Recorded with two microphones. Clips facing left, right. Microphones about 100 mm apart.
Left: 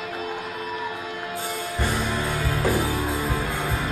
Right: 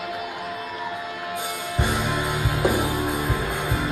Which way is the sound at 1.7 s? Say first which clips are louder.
Right 2 dB; 15° right (ahead or behind).